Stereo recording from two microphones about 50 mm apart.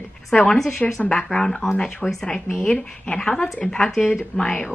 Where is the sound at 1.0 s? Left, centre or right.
Centre.